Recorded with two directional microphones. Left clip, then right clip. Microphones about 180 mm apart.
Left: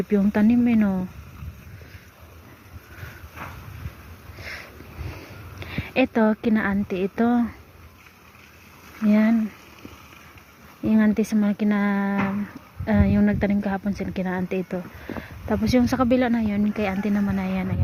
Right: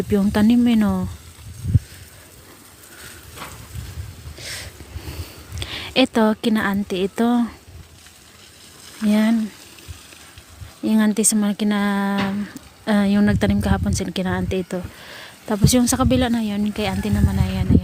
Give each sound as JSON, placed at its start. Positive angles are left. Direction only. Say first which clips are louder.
{"t": 0.1, "sound": "speech", "louder": "right 3 dB", "side_deg": -45}
{"t": 5.5, "sound": "speech", "louder": "right 4 dB", "side_deg": -45}
{"t": 9.0, "sound": "a woman's voice", "louder": "right 1 dB", "side_deg": -40}
{"t": 10.8, "sound": "a woman's voice", "louder": "right 2 dB", "side_deg": -40}